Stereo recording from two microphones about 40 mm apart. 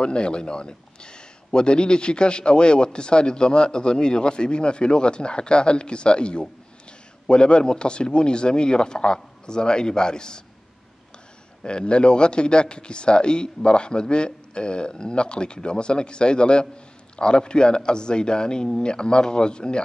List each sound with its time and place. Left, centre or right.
0.0 s speech: left
11.6 s speech: left